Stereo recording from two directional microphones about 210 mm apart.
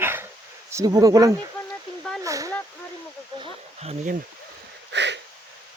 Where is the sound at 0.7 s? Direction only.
15° right (ahead or behind).